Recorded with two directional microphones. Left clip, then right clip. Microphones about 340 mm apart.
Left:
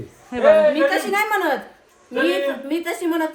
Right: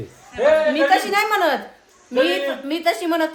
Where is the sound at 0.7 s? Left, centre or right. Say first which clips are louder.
Right 2 dB; centre.